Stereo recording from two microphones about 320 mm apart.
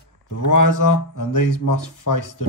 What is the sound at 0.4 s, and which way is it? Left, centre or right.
Speech, left.